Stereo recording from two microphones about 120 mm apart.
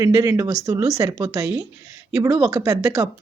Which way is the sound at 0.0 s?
25° right (ahead or behind).